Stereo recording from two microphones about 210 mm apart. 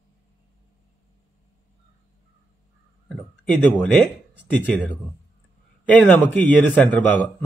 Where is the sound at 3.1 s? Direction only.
5° left (ahead or behind).